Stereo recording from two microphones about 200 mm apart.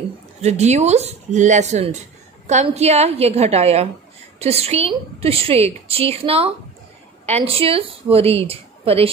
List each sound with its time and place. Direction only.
0.4 s a woman's voice: 35° right (ahead or behind)